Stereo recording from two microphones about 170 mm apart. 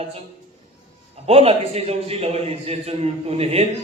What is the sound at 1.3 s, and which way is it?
Speech, 35° right (ahead or behind).